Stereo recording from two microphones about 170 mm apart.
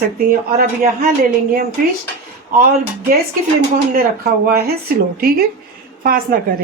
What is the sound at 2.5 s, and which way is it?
Speech, 60° right (ahead or behind).